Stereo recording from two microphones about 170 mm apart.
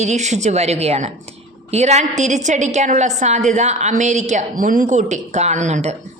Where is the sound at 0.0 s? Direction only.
40° right (ahead or behind).